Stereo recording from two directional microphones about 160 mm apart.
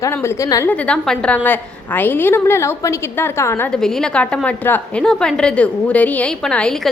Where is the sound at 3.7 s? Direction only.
5° left (ahead or behind).